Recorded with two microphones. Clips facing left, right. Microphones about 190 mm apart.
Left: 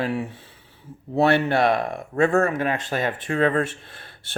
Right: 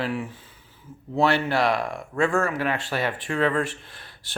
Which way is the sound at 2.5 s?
20° left (ahead or behind).